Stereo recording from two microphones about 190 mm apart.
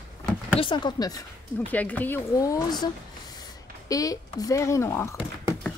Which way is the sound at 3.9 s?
20° left (ahead or behind).